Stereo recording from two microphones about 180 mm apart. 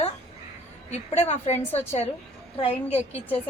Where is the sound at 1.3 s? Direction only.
40° left (ahead or behind).